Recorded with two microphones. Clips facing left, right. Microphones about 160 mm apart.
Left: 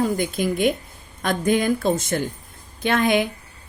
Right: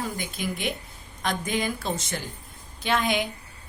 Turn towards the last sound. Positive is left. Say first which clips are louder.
# left 6 dB
turn(degrees=55)  # may be behind; listen again after turning